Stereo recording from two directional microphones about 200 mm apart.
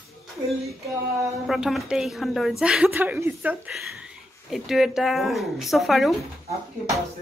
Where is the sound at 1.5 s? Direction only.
Centre (ahead or behind).